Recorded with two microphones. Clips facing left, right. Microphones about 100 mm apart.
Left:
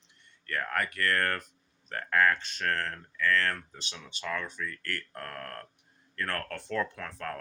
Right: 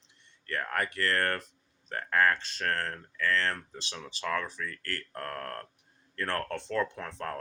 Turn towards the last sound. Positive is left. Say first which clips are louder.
# right 1 dB
turn(degrees=-30)  # may be behind; listen again after turning